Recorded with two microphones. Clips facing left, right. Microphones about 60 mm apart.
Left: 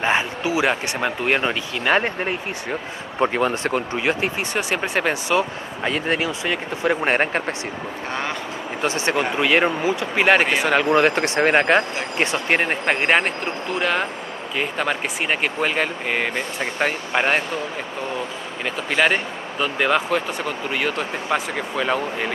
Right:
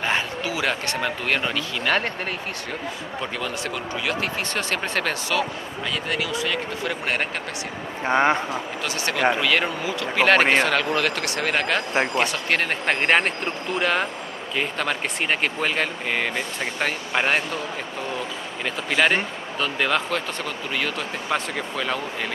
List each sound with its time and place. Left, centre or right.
0.0 s speech: left
3.2 s speech: left
4.6 s speech: centre
5.9 s speech: left
8.1 s speech: right
8.8 s speech: left
12.8 s speech: centre
18.9 s speech: centre